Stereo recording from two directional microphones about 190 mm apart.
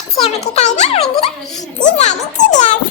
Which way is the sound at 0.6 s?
35° left (ahead or behind).